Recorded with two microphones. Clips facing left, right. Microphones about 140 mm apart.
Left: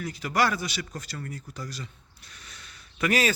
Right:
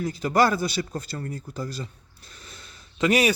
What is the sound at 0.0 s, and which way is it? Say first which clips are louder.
A man's voice: right 5 dB; 30° right (ahead or behind).